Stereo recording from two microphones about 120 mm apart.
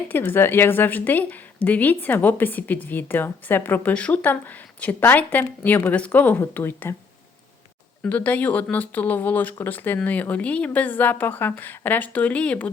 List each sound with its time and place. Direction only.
0.1 s a woman's voice: 20° left (ahead or behind)
8.0 s a woman's voice: 15° left (ahead or behind)